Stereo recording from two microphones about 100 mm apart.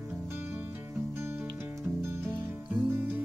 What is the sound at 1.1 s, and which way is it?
Music, 25° right (ahead or behind).